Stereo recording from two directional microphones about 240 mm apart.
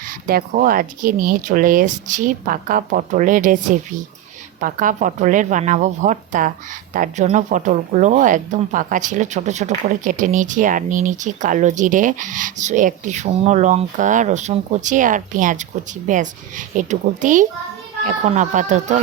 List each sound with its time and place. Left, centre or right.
0.0 s a woman's voice: right